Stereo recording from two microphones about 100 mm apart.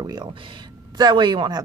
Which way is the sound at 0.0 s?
45° right (ahead or behind).